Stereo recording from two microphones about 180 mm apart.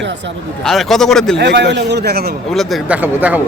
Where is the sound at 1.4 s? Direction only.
70° right (ahead or behind).